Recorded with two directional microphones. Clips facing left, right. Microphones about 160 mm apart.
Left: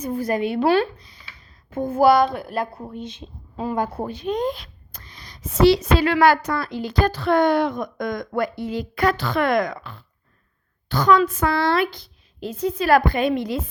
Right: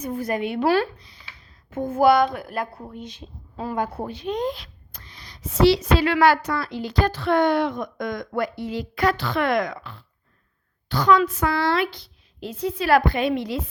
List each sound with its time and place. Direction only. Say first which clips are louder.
0.0 s a woman's voice: left 3 dB; 35° left (ahead or behind)
1.7 s speech: left 1 dB; 35° left (ahead or behind)
3.8 s speech: even; 40° left (ahead or behind)